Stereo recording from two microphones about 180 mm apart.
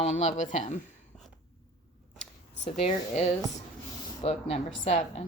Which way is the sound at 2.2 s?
35° left (ahead or behind).